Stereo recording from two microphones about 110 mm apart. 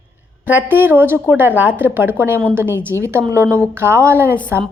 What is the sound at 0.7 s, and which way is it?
A woman's voice, 20° right (ahead or behind).